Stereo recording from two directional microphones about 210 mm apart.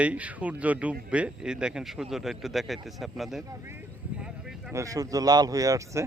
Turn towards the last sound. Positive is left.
turn(degrees=-15)  # may be behind; listen again after turning